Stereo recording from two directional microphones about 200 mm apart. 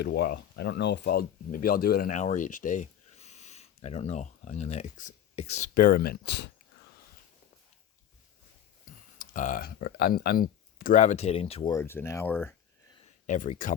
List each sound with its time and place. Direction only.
0.0 s speech: 50° left (ahead or behind)
9.1 s speech: 40° left (ahead or behind)
11.7 s speech: 10° left (ahead or behind)
13.2 s speech: 40° left (ahead or behind)